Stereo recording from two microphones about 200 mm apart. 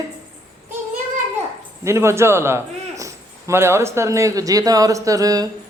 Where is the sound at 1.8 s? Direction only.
15° right (ahead or behind).